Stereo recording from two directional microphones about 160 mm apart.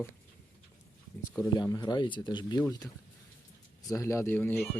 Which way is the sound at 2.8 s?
5° left (ahead or behind).